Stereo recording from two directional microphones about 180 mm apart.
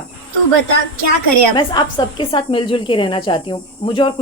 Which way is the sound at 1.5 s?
25° left (ahead or behind).